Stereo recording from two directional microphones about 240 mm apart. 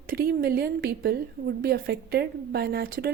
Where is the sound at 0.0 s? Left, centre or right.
Right.